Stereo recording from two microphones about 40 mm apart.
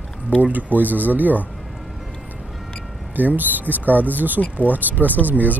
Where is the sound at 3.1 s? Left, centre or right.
Right.